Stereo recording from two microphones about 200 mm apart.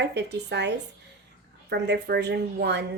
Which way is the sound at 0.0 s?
60° right (ahead or behind).